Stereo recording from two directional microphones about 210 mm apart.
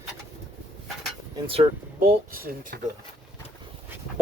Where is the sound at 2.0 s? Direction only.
45° right (ahead or behind).